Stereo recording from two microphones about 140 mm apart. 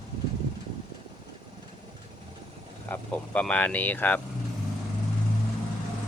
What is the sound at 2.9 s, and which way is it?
Speech, 10° left (ahead or behind).